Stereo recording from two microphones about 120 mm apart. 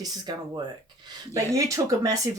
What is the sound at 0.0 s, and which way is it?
Speech, 35° right (ahead or behind).